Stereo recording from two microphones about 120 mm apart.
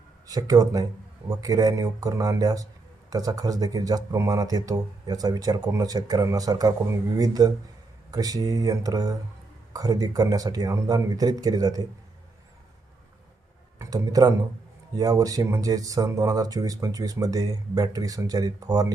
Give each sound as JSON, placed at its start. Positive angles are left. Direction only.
{"t": 0.3, "sound": "speech", "side_deg": -30}
{"t": 13.7, "sound": "speech", "side_deg": -30}